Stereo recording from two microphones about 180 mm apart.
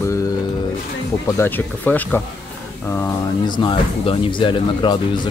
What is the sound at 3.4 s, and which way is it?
Speech, 25° left (ahead or behind).